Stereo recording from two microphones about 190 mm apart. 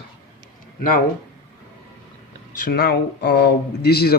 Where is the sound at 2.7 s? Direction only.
55° left (ahead or behind).